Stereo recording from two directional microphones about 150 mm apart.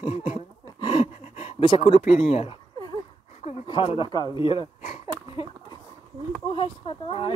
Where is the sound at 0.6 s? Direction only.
25° left (ahead or behind).